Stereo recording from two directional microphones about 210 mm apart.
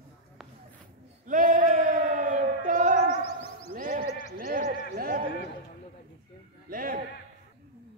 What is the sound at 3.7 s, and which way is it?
Basketball bounce, 40° right (ahead or behind).